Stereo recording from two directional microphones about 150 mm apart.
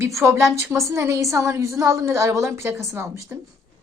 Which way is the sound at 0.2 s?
20° right (ahead or behind).